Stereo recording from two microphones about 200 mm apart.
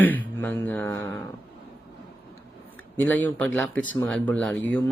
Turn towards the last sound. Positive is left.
turn(degrees=5)  # may be behind; listen again after turning